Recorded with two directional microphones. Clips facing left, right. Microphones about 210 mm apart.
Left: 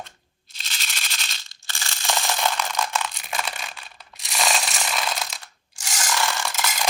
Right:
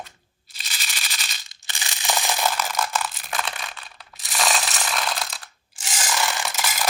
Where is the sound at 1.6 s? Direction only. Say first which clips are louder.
Even; 15° right (ahead or behind).